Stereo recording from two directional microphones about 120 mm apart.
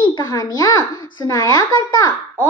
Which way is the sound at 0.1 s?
35° left (ahead or behind).